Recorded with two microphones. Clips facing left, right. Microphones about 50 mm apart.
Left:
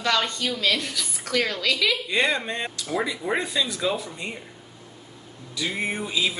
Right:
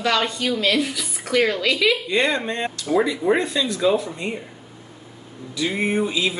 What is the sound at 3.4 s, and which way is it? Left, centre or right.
Speech, centre.